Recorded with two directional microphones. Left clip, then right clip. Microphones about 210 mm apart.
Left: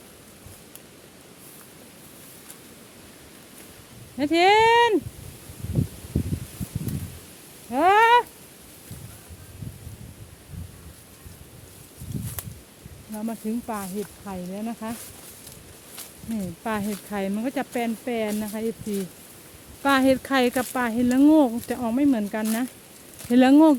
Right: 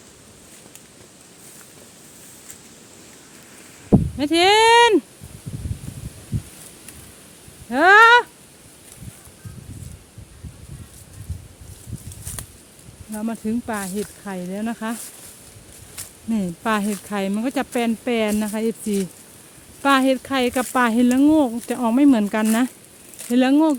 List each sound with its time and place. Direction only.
4.2 s speech: 10° right (ahead or behind)
7.7 s a sound: 20° right (ahead or behind)
13.1 s speech: 20° right (ahead or behind)
16.6 s speech: 20° right (ahead or behind)
19.8 s speech: 15° right (ahead or behind)
20.5 s speech: 20° right (ahead or behind)
21.2 s speech: 5° right (ahead or behind)
21.7 s speech: 20° right (ahead or behind)
23.3 s speech: centre (ahead or behind)